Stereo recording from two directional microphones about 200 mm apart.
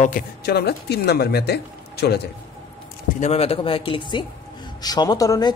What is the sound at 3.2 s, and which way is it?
Speech, 30° left (ahead or behind).